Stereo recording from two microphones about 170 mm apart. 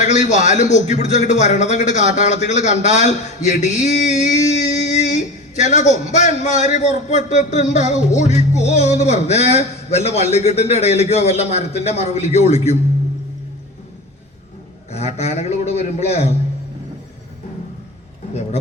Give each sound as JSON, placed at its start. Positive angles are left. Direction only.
{"t": 0.0, "sound": "a man's voice", "side_deg": 45}
{"t": 7.9, "sound": "music", "side_deg": 45}
{"t": 14.8, "sound": "a man's voice", "side_deg": 40}